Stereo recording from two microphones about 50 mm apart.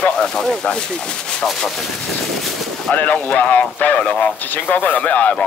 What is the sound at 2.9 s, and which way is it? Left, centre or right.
A man's voice, left.